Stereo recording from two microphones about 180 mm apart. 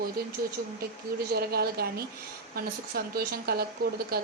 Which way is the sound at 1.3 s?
60° right (ahead or behind).